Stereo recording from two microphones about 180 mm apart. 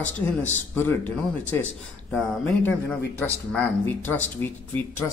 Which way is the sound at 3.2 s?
10° left (ahead or behind).